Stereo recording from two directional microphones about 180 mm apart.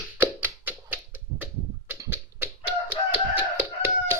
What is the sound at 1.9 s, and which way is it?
Typewriter, 10° right (ahead or behind).